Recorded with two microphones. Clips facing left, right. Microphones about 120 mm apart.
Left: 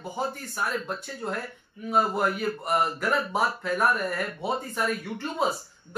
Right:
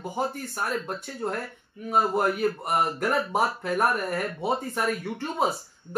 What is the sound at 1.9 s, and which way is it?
Speech, 45° right (ahead or behind).